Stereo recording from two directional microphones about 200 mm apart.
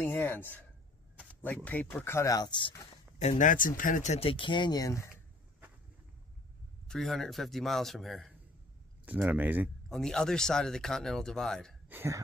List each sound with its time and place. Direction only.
0.0 s speech: 10° left (ahead or behind)
3.2 s speech: 35° left (ahead or behind); by 5.1 s 15° left (ahead or behind)
6.9 s speech: centre (ahead or behind)
9.8 s speech: centre (ahead or behind)
11.9 s speech: 10° right (ahead or behind)